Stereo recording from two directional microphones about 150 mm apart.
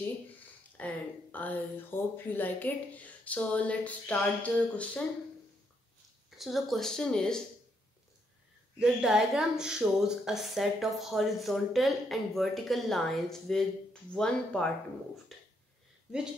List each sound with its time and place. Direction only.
0.7 s speech: 10° left (ahead or behind)
6.3 s a woman's voice: centre (ahead or behind)
8.7 s a woman's voice: 5° right (ahead or behind)
15.3 s a sound: centre (ahead or behind)